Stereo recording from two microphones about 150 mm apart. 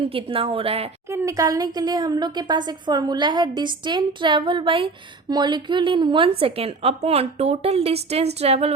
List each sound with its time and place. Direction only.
0.0 s a woman's voice: 40° right (ahead or behind)
1.1 s a woman's voice: 20° right (ahead or behind); by 8.7 s 45° right (ahead or behind)